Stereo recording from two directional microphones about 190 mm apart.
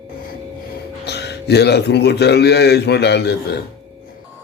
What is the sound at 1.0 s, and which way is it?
Speech, 60° left (ahead or behind).